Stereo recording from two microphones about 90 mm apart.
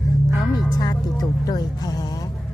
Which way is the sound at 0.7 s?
45° left (ahead or behind).